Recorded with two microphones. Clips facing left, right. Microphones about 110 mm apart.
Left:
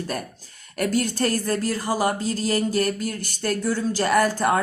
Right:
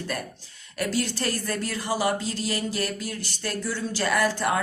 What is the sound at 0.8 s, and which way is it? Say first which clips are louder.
A woman's voice: left 5 dB; 45° left (ahead or behind).